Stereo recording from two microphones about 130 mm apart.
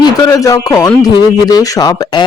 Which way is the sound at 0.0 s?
25° left (ahead or behind).